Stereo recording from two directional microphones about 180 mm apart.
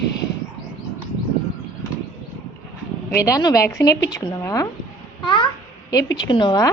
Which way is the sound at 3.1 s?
15° left (ahead or behind).